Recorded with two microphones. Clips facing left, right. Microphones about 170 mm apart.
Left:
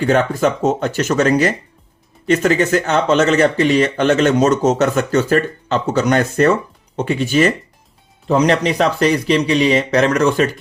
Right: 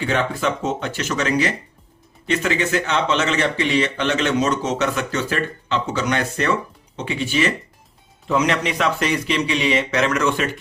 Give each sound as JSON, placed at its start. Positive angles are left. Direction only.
{"t": 0.0, "sound": "speech", "side_deg": 45}